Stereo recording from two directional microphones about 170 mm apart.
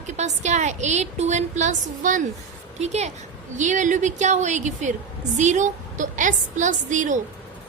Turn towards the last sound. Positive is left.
turn(degrees=-45)  # may be behind; listen again after turning